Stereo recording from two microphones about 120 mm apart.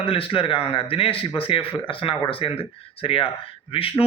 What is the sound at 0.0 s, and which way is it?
Speech, 50° left (ahead or behind).